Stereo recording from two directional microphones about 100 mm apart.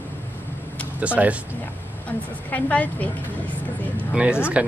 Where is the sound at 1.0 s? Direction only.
15° right (ahead or behind).